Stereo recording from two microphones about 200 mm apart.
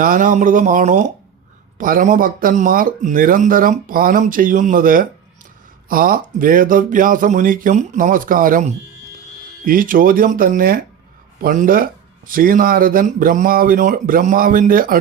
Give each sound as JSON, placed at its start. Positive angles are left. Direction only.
{"t": 0.0, "sound": "speech", "side_deg": -45}